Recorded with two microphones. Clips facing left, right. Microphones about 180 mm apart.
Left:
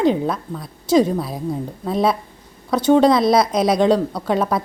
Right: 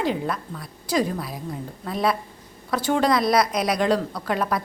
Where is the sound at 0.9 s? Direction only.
25° left (ahead or behind).